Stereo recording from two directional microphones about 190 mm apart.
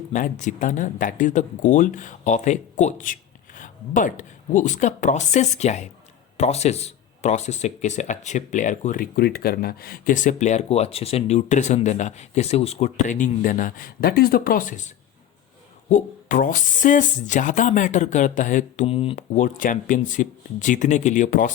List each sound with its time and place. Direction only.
0.1 s speech: 40° left (ahead or behind)
19.1 s speech: 40° left (ahead or behind)